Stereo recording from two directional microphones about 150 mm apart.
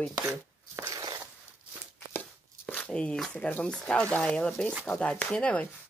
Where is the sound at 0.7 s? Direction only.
20° right (ahead or behind).